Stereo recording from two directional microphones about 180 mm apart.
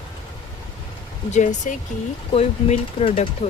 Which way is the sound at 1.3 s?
40° left (ahead or behind).